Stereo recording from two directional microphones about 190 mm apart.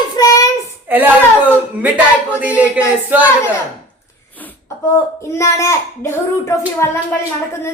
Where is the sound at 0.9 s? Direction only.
10° right (ahead or behind).